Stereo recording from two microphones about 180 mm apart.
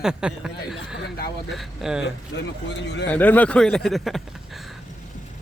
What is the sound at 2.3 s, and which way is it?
Speech, 75° left (ahead or behind).